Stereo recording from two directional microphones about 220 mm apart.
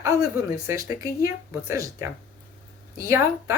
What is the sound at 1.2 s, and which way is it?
Speech, 10° right (ahead or behind).